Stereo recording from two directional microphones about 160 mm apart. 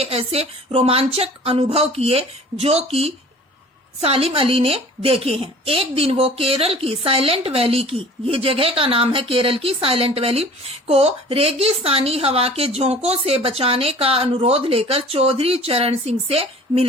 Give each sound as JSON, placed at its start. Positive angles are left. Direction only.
{"t": 0.0, "sound": "a woman's voice", "side_deg": -35}